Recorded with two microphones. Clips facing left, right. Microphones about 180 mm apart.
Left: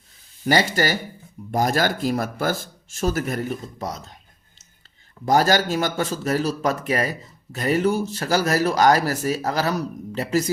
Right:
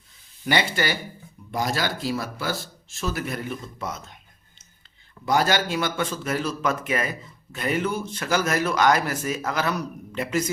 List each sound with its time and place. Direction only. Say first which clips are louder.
0.4 s speech: left 4 dB; 40° left (ahead or behind)
5.2 s speech: left 4 dB; 40° left (ahead or behind)